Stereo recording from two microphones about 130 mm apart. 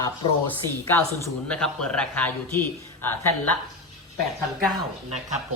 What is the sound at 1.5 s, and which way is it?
Speech, 10° left (ahead or behind).